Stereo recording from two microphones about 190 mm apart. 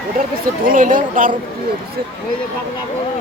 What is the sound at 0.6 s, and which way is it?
Speech, 45° right (ahead or behind).